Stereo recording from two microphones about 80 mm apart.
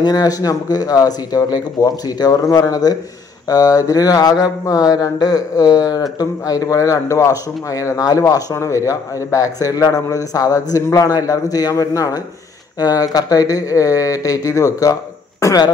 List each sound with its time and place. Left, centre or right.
0.0 s a man's voice: left
8.0 s a man's voice: left